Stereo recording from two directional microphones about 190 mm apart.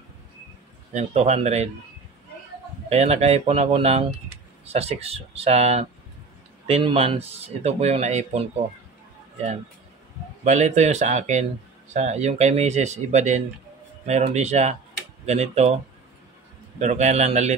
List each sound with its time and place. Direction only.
0.9 s speech: 35° right (ahead or behind)
2.9 s speech: 35° right (ahead or behind)
10.4 s speech: 35° right (ahead or behind)
16.8 s speech: 35° right (ahead or behind)